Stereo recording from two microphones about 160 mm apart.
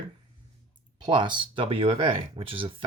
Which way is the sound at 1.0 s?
30° right (ahead or behind).